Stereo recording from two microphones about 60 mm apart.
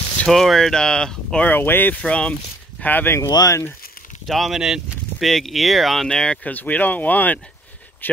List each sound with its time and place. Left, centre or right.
0.3 s speech: centre
1.4 s speech: left
2.0 s speech: centre
2.8 s speech: left
3.2 s speech: left
4.3 s speech: centre
5.2 s speech: centre
6.0 s speech: centre
6.4 s speech: left